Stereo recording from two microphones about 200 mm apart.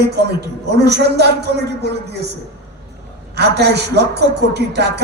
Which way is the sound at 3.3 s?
55° right (ahead or behind).